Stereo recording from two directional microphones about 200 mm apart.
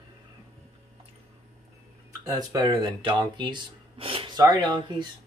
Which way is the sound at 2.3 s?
20° right (ahead or behind).